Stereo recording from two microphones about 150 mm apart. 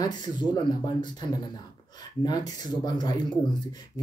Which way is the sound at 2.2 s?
30° left (ahead or behind).